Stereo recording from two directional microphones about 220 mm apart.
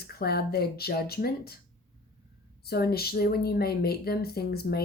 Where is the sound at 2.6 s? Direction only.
45° left (ahead or behind).